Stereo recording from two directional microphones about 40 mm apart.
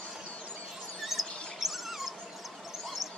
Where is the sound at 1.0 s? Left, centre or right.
Centre.